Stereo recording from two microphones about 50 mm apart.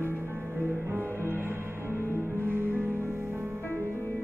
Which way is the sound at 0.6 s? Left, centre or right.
Right.